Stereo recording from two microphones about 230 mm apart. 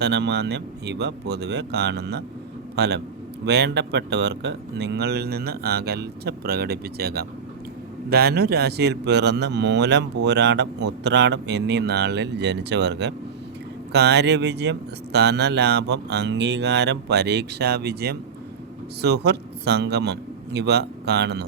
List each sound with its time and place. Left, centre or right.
0.0 s speech: right